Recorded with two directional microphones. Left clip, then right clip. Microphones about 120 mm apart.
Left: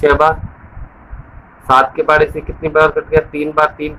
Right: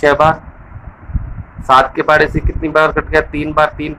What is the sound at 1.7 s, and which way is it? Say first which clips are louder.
Speech: right 1 dB; 50° right (ahead or behind).